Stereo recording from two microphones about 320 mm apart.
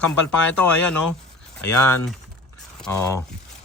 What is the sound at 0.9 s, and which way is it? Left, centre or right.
Speech, left.